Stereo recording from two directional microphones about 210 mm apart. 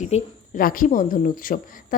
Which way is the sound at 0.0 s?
35° left (ahead or behind).